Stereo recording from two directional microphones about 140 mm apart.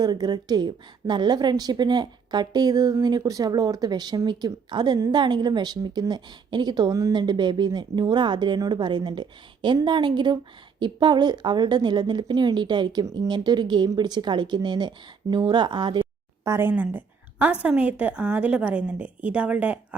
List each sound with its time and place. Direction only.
0.0 s a woman's voice: 30° right (ahead or behind)
16.4 s a woman's voice: 20° right (ahead or behind)